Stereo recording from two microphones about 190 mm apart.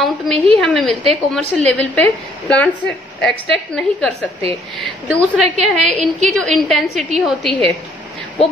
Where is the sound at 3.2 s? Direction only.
5° left (ahead or behind).